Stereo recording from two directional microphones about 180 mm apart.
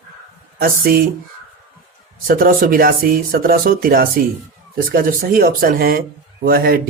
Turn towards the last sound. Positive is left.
turn(degrees=-55)  # may be behind; listen again after turning